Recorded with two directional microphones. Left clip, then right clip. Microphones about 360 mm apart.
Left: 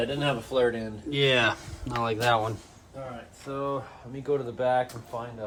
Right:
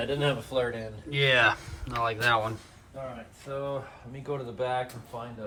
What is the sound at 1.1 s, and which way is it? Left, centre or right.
Speech, centre.